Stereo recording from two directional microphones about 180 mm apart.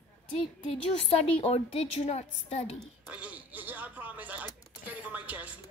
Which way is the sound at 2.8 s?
5° right (ahead or behind).